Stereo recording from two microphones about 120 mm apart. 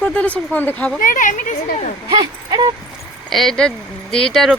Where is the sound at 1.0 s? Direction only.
90° left.